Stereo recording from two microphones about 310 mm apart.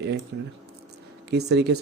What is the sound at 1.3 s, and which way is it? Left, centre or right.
Speech, right.